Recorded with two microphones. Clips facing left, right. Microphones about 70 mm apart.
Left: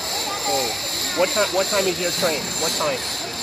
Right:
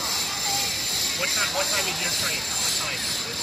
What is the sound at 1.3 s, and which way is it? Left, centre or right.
Speech, left.